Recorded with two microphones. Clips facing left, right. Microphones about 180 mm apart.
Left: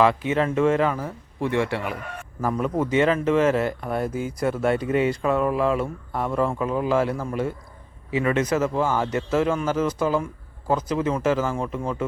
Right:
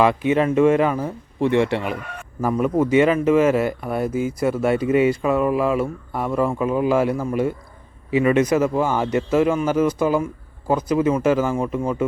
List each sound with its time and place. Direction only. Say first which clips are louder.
0.0 s speech: right 3 dB; 15° right (ahead or behind)
2.4 s speech: right 5 dB; 10° right (ahead or behind)